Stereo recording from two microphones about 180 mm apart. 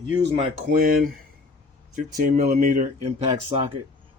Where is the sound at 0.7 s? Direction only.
55° right (ahead or behind).